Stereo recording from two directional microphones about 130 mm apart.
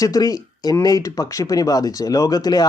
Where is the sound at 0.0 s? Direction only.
25° left (ahead or behind).